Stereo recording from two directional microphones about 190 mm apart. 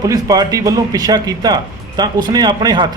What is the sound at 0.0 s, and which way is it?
Speech, 20° right (ahead or behind).